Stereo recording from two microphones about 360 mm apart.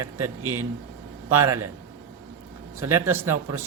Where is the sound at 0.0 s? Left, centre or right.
Right.